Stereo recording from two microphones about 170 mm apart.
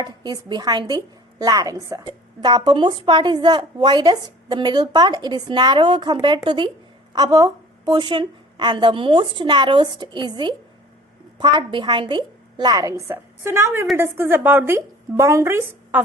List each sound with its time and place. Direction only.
0.0 s a woman's voice: 25° right (ahead or behind)